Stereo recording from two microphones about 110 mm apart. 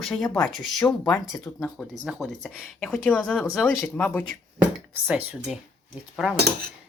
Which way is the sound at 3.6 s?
20° left (ahead or behind).